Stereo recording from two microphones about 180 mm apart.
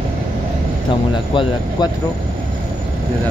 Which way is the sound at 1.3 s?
25° left (ahead or behind).